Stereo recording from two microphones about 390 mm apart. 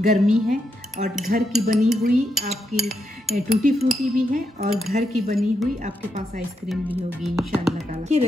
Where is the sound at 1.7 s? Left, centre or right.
Centre.